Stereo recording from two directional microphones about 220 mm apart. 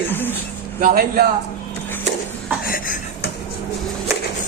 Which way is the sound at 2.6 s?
40° left (ahead or behind).